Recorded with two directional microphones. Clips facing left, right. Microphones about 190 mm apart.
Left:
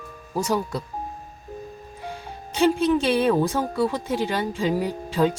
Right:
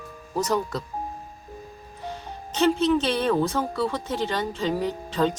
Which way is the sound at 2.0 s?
10° left (ahead or behind).